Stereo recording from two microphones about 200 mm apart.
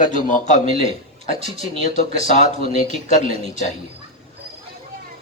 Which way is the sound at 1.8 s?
35° left (ahead or behind).